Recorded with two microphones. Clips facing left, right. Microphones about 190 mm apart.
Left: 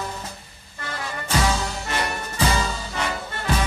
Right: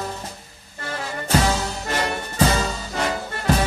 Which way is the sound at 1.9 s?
40° right (ahead or behind).